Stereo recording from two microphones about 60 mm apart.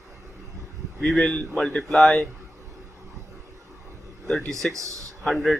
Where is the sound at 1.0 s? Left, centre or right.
Centre.